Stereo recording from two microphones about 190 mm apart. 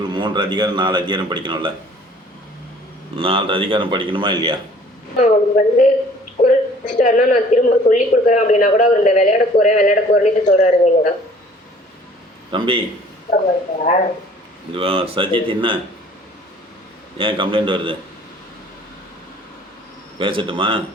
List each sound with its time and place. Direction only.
0.1 s a man's voice: 25° right (ahead or behind)
3.2 s a man's voice: 30° right (ahead or behind)
5.2 s a woman's voice: 40° left (ahead or behind)
12.5 s a man's voice: 25° right (ahead or behind)
14.8 s a man's voice: 30° right (ahead or behind)
17.2 s a man's voice: 25° right (ahead or behind)
20.1 s a man's voice: 25° right (ahead or behind)